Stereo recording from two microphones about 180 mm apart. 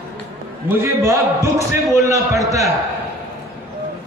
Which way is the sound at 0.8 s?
15° right (ahead or behind).